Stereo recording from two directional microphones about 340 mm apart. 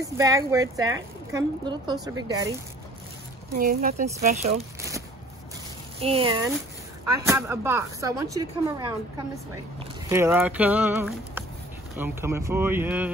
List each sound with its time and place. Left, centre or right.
0.0 s speech: centre
3.5 s speech: right
5.9 s speech: centre